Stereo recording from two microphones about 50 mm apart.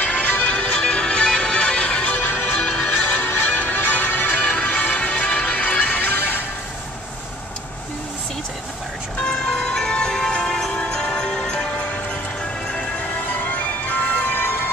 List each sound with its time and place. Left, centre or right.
0.1 s music: left
9.2 s music: centre
10.7 s music: centre
13.4 s music: left
14.4 s emergency vehicle: left